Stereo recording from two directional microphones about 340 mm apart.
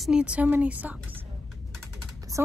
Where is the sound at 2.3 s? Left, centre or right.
Centre.